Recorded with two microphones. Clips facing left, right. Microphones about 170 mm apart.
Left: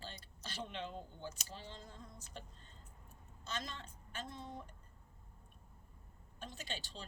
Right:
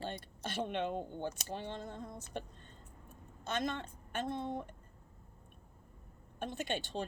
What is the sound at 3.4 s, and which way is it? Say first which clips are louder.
A woman's voice: right 9 dB; 60° right (ahead or behind).